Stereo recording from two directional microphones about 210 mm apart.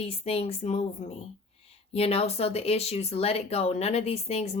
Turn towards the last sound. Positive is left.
turn(degrees=30)  # may be behind; listen again after turning